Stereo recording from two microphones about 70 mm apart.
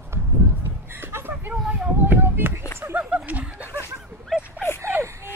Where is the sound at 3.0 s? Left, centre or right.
Centre.